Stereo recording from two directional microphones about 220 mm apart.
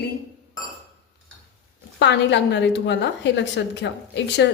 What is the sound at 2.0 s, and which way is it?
A woman's voice, 55° left (ahead or behind).